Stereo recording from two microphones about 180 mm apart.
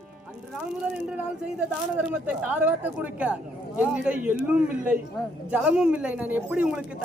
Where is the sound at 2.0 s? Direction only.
10° right (ahead or behind).